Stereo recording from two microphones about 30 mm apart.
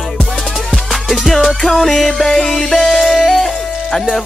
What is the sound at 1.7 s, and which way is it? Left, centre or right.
Music, centre.